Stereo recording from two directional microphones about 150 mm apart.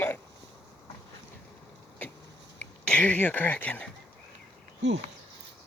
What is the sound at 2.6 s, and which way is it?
Speech, 10° left (ahead or behind).